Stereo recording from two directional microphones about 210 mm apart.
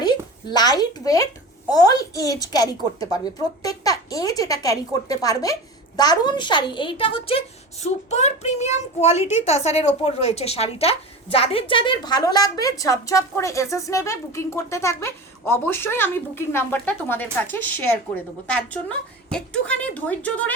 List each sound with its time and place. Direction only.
0.0 s a woman's voice: 20° left (ahead or behind)